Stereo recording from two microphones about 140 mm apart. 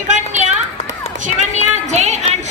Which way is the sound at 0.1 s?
60° right (ahead or behind).